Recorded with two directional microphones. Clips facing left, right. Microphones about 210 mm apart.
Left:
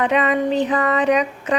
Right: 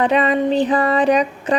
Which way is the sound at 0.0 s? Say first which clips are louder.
Right 2 dB; 35° right (ahead or behind).